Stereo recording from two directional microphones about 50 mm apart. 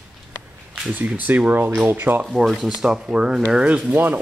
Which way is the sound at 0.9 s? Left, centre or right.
Right.